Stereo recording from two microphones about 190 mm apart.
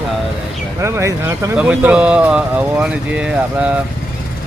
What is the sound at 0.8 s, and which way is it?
Speech, 15° right (ahead or behind).